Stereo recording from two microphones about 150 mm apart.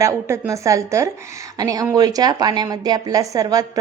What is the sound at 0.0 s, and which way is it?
A woman's voice, 20° right (ahead or behind).